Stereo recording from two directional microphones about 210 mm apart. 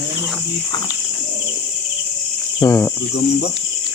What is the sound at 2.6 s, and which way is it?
Cricket, 15° left (ahead or behind).